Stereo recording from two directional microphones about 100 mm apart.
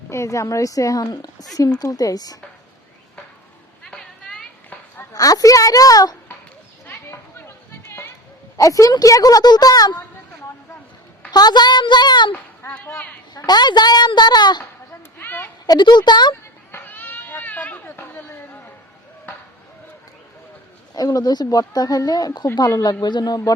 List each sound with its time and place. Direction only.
0.1 s speech: 30° left (ahead or behind)
3.9 s a sound: 5° left (ahead or behind)
5.1 s speech: 35° left (ahead or behind)
6.8 s a sound: 25° left (ahead or behind)
8.5 s speech: 35° left (ahead or behind)
11.3 s a child's voice: 45° left (ahead or behind)
12.3 s speech: 20° left (ahead or behind)
13.3 s a child's voice: 45° left (ahead or behind)
15.2 s a sound: 20° left (ahead or behind)
15.6 s a child's voice: 45° left (ahead or behind)
16.7 s a sound: 20° left (ahead or behind)
20.9 s a child's voice: 40° left (ahead or behind)